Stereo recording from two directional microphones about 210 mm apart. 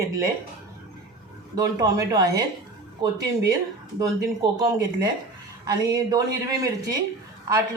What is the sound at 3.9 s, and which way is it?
A woman's voice, 15° right (ahead or behind).